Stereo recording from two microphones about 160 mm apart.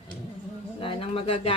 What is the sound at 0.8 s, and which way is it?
Speech, 35° left (ahead or behind).